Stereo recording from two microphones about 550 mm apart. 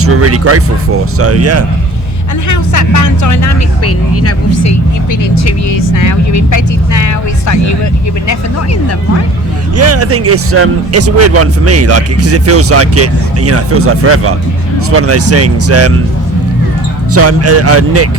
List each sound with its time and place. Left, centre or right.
0.0 s speech: right
2.5 s speech: left
9.7 s speech: right
17.1 s speech: right